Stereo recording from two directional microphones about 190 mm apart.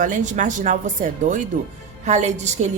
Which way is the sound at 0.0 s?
40° right (ahead or behind).